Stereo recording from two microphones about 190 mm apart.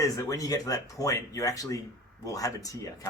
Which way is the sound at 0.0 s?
15° left (ahead or behind).